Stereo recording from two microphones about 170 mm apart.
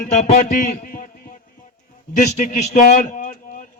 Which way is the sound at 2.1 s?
45° left (ahead or behind).